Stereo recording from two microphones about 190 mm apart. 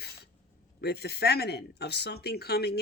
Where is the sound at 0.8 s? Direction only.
55° left (ahead or behind).